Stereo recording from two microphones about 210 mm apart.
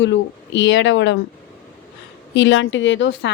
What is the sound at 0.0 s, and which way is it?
A woman's voice, 60° left (ahead or behind).